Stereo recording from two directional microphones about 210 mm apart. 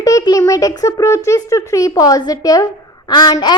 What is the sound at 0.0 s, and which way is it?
A child's voice, 15° left (ahead or behind).